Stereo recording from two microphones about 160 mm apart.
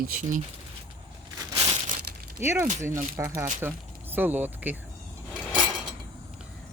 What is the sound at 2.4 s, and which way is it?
Speech, 15° right (ahead or behind).